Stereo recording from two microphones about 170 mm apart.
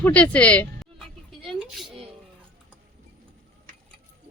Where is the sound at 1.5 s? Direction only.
Centre (ahead or behind).